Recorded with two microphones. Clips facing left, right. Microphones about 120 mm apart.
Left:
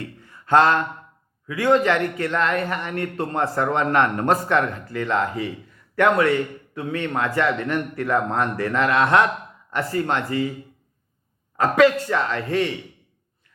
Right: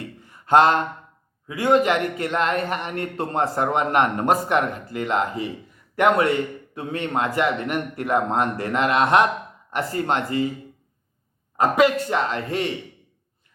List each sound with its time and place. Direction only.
0.0 s a sound: 20° right (ahead or behind)
1.6 s a man's voice: 15° right (ahead or behind)
11.5 s a man's voice: 15° right (ahead or behind)